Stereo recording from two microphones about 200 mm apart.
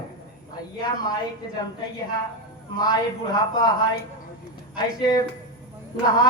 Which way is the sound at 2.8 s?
20° left (ahead or behind).